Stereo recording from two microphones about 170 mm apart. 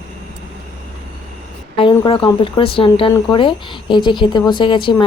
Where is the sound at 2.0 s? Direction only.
25° left (ahead or behind).